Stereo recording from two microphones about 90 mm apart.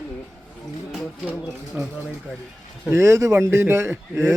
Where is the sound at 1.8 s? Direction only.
20° right (ahead or behind).